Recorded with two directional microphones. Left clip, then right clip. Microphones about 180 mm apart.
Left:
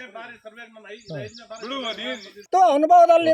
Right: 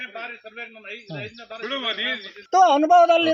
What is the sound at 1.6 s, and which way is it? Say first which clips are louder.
Speech: right 3 dB; 40° right (ahead or behind).